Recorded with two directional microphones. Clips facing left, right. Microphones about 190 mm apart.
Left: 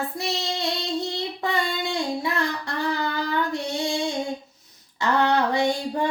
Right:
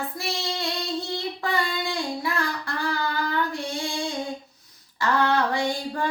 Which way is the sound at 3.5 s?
20° left (ahead or behind).